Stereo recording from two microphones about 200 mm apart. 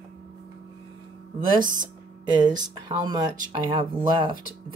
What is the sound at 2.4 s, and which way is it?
Speech, 20° right (ahead or behind).